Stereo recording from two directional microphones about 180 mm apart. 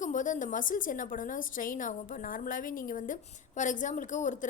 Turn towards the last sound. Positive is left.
turn(degrees=45)  # may be behind; listen again after turning